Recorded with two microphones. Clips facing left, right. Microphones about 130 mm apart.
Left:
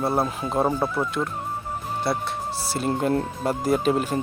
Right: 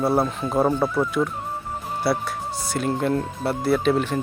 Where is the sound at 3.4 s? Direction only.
40° left (ahead or behind).